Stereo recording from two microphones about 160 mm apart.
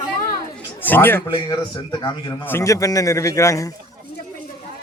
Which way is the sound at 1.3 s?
30° left (ahead or behind).